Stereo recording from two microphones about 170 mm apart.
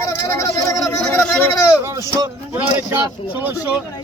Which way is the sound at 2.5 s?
10° right (ahead or behind).